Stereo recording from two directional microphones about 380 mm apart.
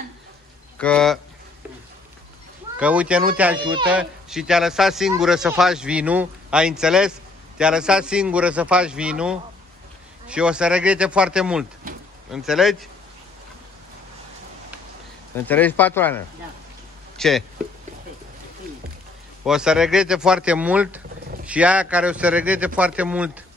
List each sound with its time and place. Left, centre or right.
0.7 s speech: centre
2.8 s speech: centre
15.4 s speech: centre
17.2 s speech: centre
19.4 s speech: centre